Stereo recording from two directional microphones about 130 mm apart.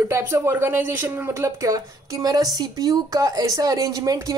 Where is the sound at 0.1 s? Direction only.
20° right (ahead or behind).